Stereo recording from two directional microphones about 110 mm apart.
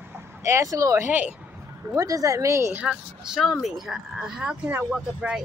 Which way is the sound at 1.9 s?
30° right (ahead or behind).